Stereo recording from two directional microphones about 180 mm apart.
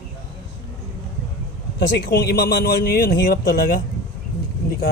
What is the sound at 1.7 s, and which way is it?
A man's voice, 60° left (ahead or behind).